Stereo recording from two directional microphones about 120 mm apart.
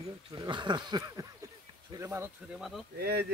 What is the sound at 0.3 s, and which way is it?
Speech, 40° right (ahead or behind).